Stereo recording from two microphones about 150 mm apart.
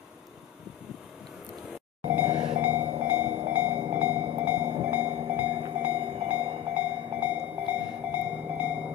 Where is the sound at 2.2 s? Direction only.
25° right (ahead or behind).